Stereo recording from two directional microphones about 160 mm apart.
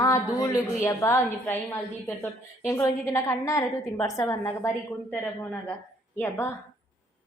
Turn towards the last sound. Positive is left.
turn(degrees=15)  # may be behind; listen again after turning